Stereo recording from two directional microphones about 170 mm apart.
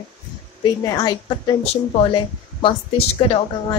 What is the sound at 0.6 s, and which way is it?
A woman's voice, 20° left (ahead or behind).